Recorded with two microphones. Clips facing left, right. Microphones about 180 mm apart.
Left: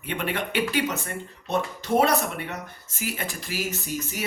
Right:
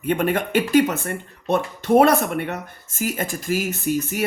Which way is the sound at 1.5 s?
55° right (ahead or behind).